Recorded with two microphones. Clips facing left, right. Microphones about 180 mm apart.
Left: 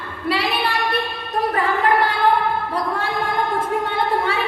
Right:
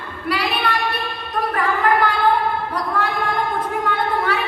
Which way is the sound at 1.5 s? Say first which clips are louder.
Even; 25° left (ahead or behind).